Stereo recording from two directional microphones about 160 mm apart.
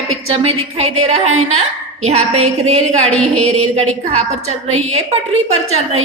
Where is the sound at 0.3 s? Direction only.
40° right (ahead or behind).